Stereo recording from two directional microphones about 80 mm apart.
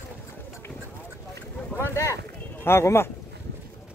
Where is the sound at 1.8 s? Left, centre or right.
Left.